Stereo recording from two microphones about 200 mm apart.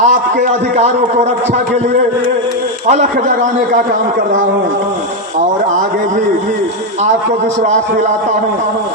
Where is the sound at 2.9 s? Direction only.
35° right (ahead or behind).